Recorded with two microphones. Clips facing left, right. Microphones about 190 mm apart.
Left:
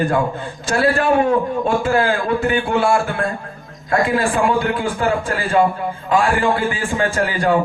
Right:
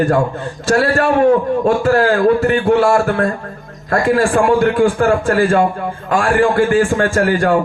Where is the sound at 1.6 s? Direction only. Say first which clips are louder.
Right 4 dB; 40° right (ahead or behind).